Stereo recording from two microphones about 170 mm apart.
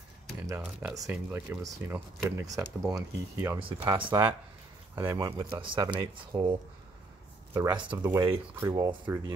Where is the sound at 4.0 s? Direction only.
30° right (ahead or behind).